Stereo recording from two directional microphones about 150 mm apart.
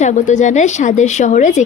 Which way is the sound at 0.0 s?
55° left (ahead or behind).